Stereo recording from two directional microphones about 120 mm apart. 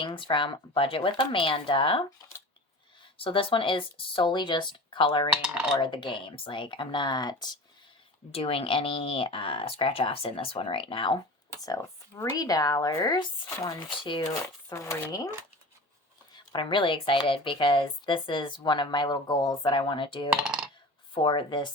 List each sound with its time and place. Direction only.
0.0 s speech: 40° left (ahead or behind)
3.2 s speech: 45° left (ahead or behind)
8.3 s speech: 50° left (ahead or behind)
11.6 s speech: 30° left (ahead or behind)
14.0 s speech: 40° left (ahead or behind)
14.7 s speech: 25° left (ahead or behind)
16.3 s speech: 40° left (ahead or behind)
20.3 s computer keyboard: 5° right (ahead or behind)
21.1 s speech: 45° left (ahead or behind)